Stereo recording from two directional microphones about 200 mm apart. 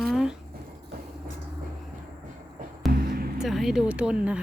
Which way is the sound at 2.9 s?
50° right (ahead or behind).